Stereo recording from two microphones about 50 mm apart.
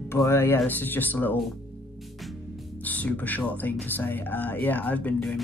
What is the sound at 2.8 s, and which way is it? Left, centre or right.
Speech, left.